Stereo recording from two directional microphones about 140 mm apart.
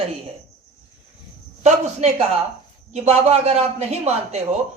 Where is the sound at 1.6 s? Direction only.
55° right (ahead or behind).